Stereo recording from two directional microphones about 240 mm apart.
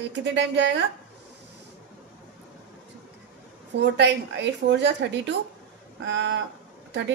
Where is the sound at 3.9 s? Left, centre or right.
Right.